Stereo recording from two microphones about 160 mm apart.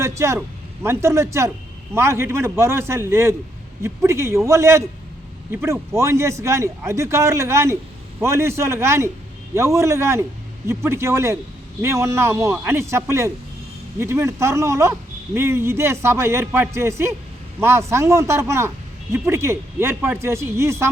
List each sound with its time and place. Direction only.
0.0 s a man's voice: 15° right (ahead or behind)